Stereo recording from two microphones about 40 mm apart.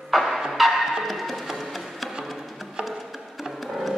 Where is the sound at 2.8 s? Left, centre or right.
Right.